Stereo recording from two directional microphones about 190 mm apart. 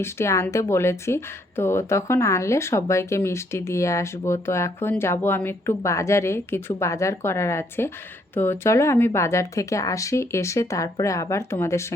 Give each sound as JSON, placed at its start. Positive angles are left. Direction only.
{"t": 0.0, "sound": "speech", "side_deg": 15}